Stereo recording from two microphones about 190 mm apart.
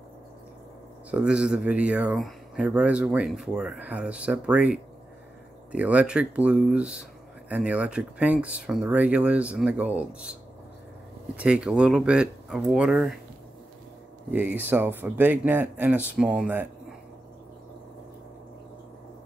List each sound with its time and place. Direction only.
1.1 s speech: 5° right (ahead or behind)
11.3 s speech: 5° right (ahead or behind)
14.3 s speech: 10° right (ahead or behind)